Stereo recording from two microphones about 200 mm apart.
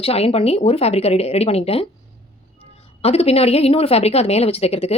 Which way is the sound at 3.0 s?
30° left (ahead or behind).